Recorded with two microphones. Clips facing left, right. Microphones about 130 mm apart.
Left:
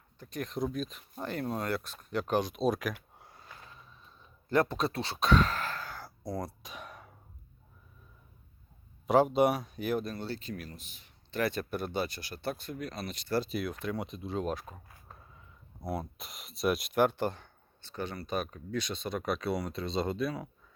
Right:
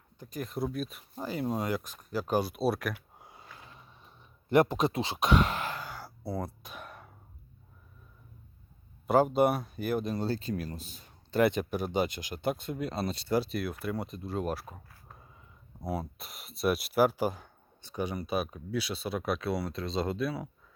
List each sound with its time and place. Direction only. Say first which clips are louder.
0.2 s speech: even; 5° right (ahead or behind)
4.0 s a sound: right 1 dB; 20° right (ahead or behind)
6.2 s throat clearing: right 1 dB; 5° right (ahead or behind)
9.0 s speech: even; 5° right (ahead or behind)
10.2 s a man's voice: right 6 dB; 35° right (ahead or behind)
11.7 s speech: right 3 dB; 15° right (ahead or behind); by 13.3 s 30° right (ahead or behind)
13.3 s speech: right 1 dB; 5° right (ahead or behind)
15.8 s speech: right 1 dB; 10° right (ahead or behind)